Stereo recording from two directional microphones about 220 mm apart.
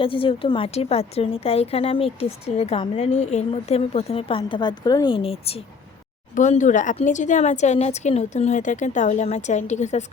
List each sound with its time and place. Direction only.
0.0 s a woman's voice: 25° left (ahead or behind)